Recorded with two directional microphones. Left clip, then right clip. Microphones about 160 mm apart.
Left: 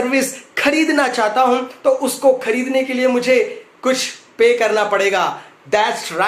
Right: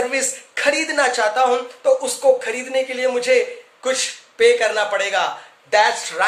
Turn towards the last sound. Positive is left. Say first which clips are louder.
# even
turn(degrees=-20)  # may be behind; listen again after turning